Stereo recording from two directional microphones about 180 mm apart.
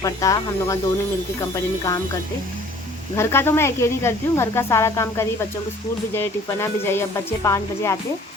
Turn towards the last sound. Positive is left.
turn(degrees=15)  # may be behind; listen again after turning